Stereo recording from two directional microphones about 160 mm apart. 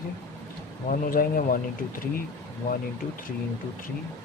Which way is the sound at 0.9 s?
60° left (ahead or behind).